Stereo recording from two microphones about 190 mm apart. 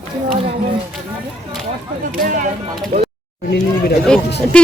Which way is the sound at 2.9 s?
45° right (ahead or behind).